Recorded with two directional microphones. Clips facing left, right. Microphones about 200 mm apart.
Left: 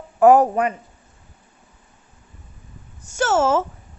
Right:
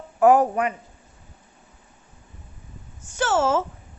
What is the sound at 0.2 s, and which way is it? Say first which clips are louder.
Speech: left 3 dB; 40° left (ahead or behind).